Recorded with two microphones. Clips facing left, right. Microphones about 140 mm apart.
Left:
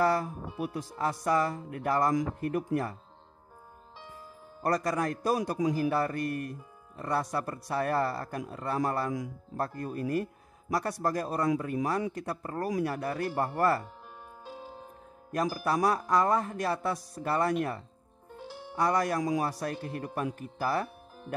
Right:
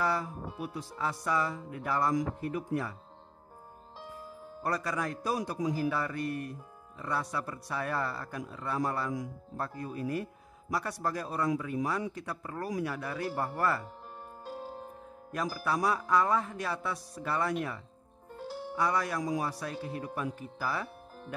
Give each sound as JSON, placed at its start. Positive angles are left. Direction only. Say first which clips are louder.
{"t": 0.0, "sound": "speech", "louder": "left 5 dB", "side_deg": 45}
{"t": 4.6, "sound": "speech", "louder": "left 4 dB", "side_deg": 45}
{"t": 15.3, "sound": "speech", "louder": "left 4 dB", "side_deg": 45}
{"t": 18.8, "sound": "speech", "louder": "left 4 dB", "side_deg": 45}